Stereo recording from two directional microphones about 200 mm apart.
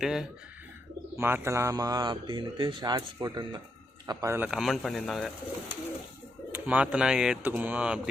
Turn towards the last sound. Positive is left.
turn(degrees=-5)  # may be behind; listen again after turning